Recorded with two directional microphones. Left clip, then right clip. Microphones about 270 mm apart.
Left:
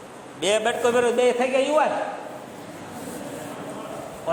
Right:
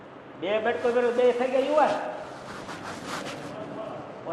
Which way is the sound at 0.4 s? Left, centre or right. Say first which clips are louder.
Left 4 dB; left.